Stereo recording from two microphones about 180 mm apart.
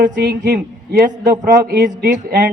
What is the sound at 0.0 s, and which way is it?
A man's voice, 50° right (ahead or behind).